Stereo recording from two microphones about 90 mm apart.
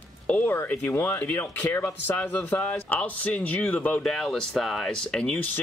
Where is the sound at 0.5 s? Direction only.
25° left (ahead or behind).